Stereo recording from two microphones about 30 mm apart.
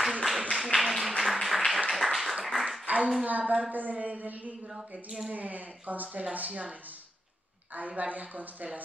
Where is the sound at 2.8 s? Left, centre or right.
Right.